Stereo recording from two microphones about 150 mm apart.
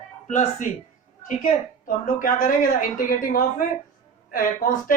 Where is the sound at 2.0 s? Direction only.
65° left (ahead or behind).